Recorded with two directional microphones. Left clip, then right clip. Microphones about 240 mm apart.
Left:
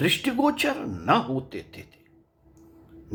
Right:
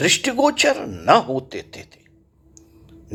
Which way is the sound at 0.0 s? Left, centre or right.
Right.